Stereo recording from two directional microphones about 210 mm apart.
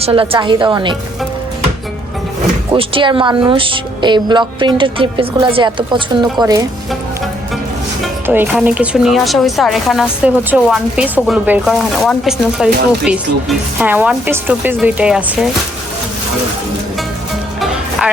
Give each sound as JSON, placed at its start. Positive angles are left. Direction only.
{"t": 0.0, "sound": "speech", "side_deg": -25}
{"t": 2.7, "sound": "a woman's voice", "side_deg": -25}
{"t": 8.0, "sound": "a woman's voice", "side_deg": -5}
{"t": 17.6, "sound": "music", "side_deg": -5}